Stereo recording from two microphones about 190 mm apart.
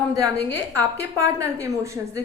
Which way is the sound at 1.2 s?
15° right (ahead or behind).